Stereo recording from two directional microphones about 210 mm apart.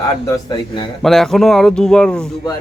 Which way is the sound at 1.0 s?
Centre (ahead or behind).